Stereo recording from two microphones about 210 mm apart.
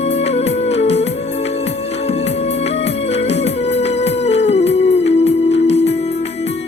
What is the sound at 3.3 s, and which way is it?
Music, 30° left (ahead or behind).